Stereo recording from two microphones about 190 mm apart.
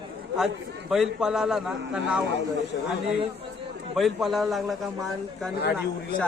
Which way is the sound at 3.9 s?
Centre (ahead or behind).